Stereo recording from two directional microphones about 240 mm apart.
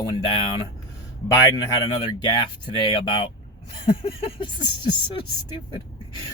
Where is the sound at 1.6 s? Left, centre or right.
Centre.